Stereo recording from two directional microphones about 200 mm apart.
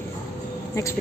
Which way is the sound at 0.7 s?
15° left (ahead or behind).